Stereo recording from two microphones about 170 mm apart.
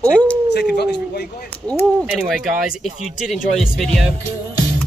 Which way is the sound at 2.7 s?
5° right (ahead or behind).